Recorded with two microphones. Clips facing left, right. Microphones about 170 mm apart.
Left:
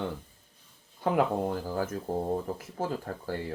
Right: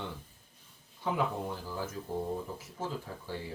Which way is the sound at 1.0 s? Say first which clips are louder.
Left 6 dB; 60° left (ahead or behind).